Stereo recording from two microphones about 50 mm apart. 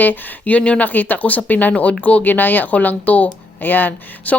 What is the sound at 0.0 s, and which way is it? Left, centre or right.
Speech, left.